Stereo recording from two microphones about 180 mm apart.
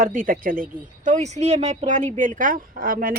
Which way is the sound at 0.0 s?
50° right (ahead or behind).